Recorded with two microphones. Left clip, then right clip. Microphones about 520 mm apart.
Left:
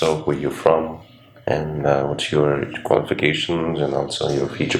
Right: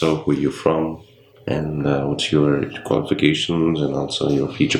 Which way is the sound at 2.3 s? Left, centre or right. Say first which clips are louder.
Even; left.